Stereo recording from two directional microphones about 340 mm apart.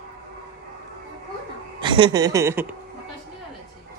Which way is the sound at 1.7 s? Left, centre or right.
Centre.